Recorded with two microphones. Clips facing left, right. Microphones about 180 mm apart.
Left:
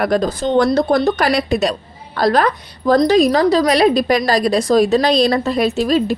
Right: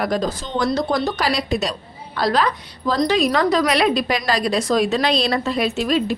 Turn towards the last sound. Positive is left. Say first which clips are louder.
# left 4 dB
turn(degrees=40)  # may be behind; listen again after turning